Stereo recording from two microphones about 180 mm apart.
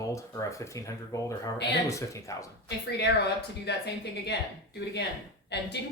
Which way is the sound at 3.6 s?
70° left (ahead or behind).